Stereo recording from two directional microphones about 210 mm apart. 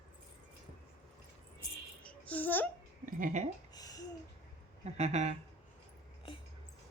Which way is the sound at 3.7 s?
15° left (ahead or behind).